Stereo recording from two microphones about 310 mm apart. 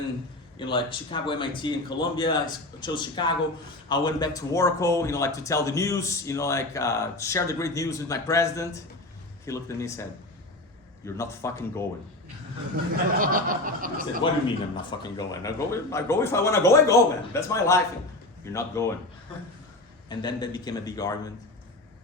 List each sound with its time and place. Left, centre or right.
0.6 s speech: centre
13.1 s a sound: right
14.4 s speech: centre
20.1 s speech: centre